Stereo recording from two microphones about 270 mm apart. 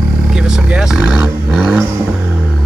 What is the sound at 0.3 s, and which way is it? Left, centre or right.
Vehicle, centre.